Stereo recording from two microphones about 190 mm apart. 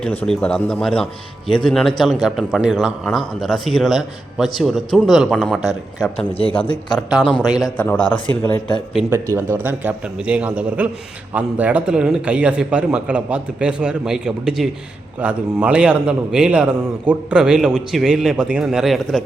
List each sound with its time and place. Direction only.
0.0 s a man's voice: 5° left (ahead or behind)
6.3 s a man's voice: 30° left (ahead or behind)
7.8 s a man's voice: 5° left (ahead or behind)
9.0 s a man's voice: 15° right (ahead or behind)